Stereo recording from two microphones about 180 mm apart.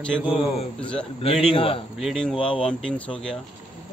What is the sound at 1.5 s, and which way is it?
Speech, 30° left (ahead or behind).